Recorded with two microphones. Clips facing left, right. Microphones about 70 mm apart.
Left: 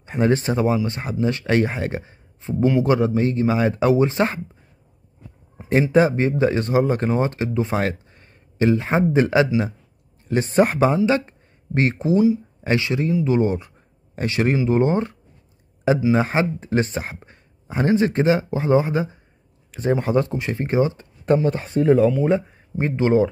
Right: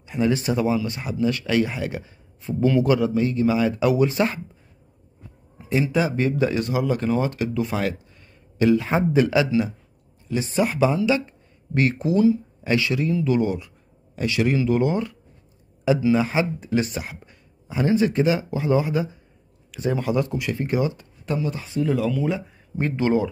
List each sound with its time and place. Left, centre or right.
0.0 s speech: left
5.7 s speech: left
10.2 s a man's voice: left
11.7 s speech: left
22.8 s speech: left